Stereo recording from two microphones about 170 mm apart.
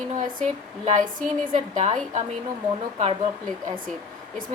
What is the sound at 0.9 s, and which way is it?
A woman's voice, 50° right (ahead or behind).